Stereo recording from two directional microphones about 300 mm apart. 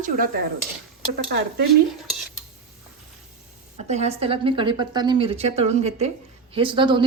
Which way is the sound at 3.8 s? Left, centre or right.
Right.